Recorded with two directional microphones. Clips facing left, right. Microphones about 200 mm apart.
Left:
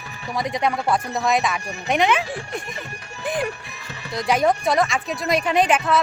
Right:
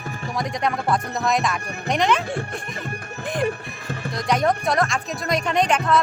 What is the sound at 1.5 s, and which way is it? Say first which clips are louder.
Speech: even; 55° right (ahead or behind).